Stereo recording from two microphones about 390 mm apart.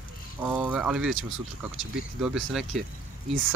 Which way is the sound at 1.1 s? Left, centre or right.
Right.